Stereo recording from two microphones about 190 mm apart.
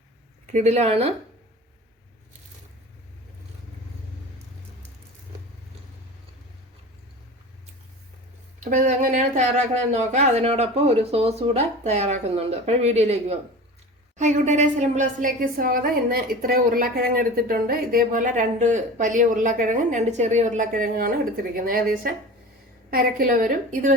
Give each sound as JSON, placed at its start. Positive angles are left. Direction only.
{"t": 0.4, "sound": "speech", "side_deg": -35}
{"t": 8.6, "sound": "a woman's voice", "side_deg": -45}